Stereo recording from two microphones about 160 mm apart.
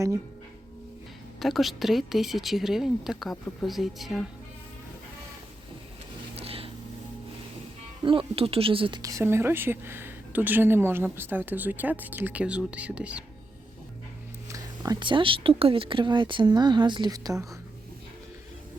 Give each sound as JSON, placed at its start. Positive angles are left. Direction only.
{"t": 1.4, "sound": "speech", "side_deg": 0}
{"t": 6.3, "sound": "a sound", "side_deg": -35}
{"t": 8.0, "sound": "a woman's voice", "side_deg": -35}
{"t": 9.0, "sound": "speech", "side_deg": -20}
{"t": 14.5, "sound": "speech", "side_deg": -25}